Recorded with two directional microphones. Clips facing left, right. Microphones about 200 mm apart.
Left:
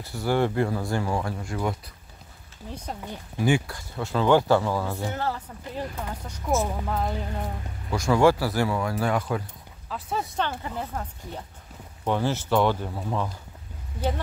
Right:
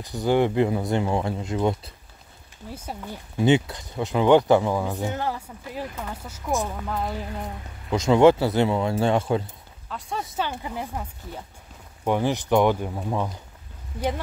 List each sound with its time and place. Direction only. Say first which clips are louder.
0.0 s speech: right 3 dB; 20° right (ahead or behind)
2.7 s speech: even; 5° right (ahead or behind)
3.3 s speech: right 4 dB; 20° right (ahead or behind)
6.2 s speech: left 1 dB; 5° right (ahead or behind)
7.9 s speech: right 4 dB; 20° right (ahead or behind)
9.8 s speech: left 1 dB; centre (ahead or behind); by 13.3 s 15° right (ahead or behind)